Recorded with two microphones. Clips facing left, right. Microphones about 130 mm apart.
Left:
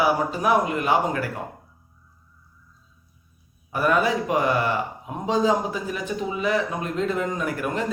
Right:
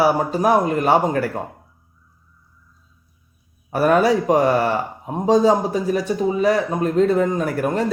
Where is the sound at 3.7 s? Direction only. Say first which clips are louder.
Right 6 dB; 45° right (ahead or behind).